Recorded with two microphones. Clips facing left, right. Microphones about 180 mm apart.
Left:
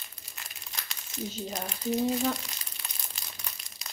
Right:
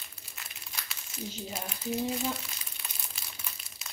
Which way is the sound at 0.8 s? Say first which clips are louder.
Left 4 dB; 5° right (ahead or behind).